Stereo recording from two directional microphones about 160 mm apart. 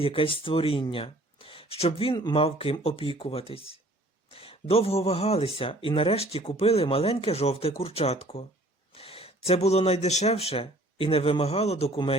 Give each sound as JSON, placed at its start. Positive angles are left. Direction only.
{"t": 0.0, "sound": "speech", "side_deg": 35}